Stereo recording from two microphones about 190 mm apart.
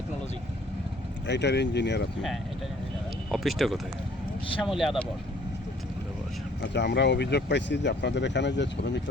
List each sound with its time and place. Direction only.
1.3 s speech: 65° left (ahead or behind)
3.3 s speech: centre (ahead or behind)
6.6 s speech: 65° left (ahead or behind)